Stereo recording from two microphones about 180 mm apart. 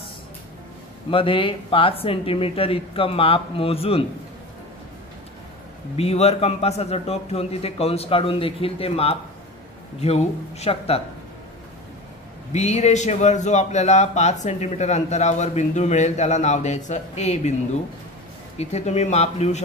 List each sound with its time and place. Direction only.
1.1 s a man's voice: 30° left (ahead or behind)
5.9 s a man's voice: 35° left (ahead or behind)
12.5 s a man's voice: 40° left (ahead or behind)
18.6 s a man's voice: 40° left (ahead or behind)